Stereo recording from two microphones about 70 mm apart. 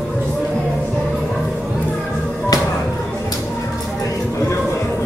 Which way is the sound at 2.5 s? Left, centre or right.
Left.